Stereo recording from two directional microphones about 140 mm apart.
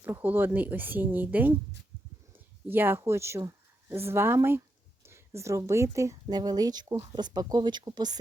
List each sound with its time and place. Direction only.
0.0 s speech: 15° right (ahead or behind)
2.6 s speech: 15° right (ahead or behind); by 8.2 s 30° right (ahead or behind)